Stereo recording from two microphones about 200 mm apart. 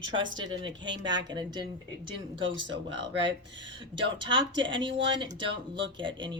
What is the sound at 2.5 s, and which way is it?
Speech, 65° right (ahead or behind).